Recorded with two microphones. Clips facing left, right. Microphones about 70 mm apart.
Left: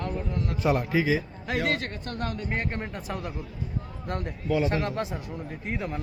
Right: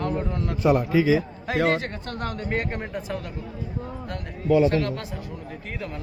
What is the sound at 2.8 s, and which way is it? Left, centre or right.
Speech, centre.